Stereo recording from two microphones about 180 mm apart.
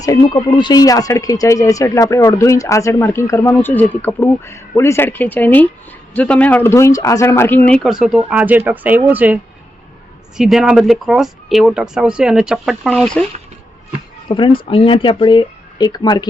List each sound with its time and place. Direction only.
0.0 s speech: 20° left (ahead or behind); by 13.2 s centre (ahead or behind)
14.3 s speech: 25° left (ahead or behind)